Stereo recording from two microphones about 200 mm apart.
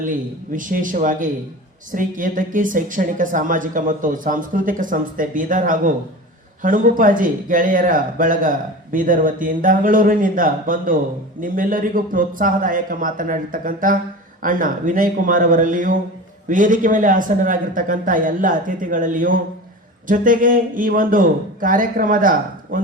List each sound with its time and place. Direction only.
0.5 s a woman's voice: 40° right (ahead or behind)